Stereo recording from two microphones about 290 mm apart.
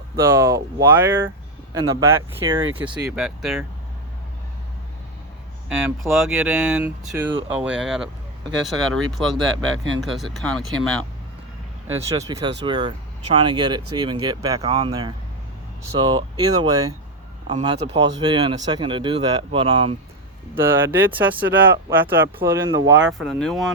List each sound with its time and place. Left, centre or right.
0.2 s speech: centre
5.6 s speech: centre
11.9 s speech: centre
23.0 s speech: centre